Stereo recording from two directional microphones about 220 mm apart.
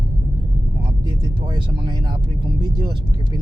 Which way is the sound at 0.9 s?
20° right (ahead or behind).